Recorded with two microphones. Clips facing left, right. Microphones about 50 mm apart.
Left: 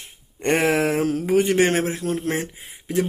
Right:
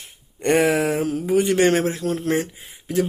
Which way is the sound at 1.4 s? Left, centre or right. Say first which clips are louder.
Right 2 dB; left.